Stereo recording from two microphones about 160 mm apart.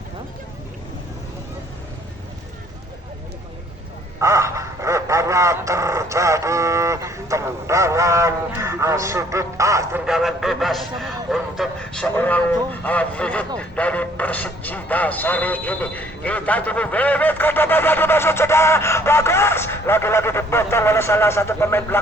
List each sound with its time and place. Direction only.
4.2 s dog: 20° right (ahead or behind)
10.1 s a man's voice: centre (ahead or behind); by 22.0 s 15° left (ahead or behind)